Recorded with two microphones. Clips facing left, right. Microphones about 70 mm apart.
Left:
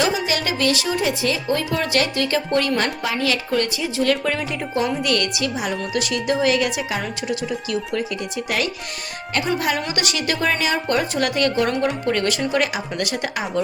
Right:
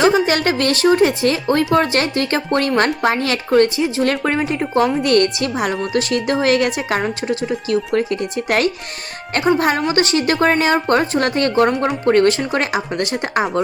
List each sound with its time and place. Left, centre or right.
0.0 s speech: right